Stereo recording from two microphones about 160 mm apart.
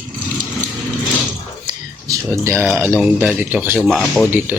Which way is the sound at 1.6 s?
20° right (ahead or behind).